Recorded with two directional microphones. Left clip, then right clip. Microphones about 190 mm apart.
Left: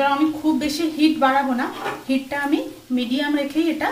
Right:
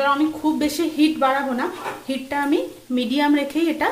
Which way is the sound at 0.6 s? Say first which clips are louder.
Even; 45° right (ahead or behind).